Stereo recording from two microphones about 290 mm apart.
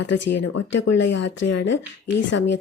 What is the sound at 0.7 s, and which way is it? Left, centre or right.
Speech, left.